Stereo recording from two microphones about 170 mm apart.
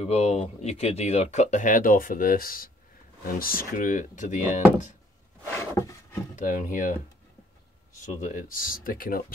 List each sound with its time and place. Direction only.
0.0 s speech: 40° left (ahead or behind)
5.6 s a sound: 20° left (ahead or behind)
6.3 s speech: 50° left (ahead or behind)
8.0 s speech: 50° left (ahead or behind)